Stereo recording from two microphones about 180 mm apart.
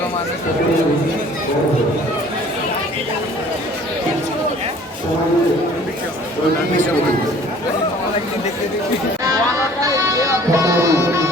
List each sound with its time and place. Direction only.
9.8 s music: 20° right (ahead or behind)
10.5 s tabla: 15° right (ahead or behind)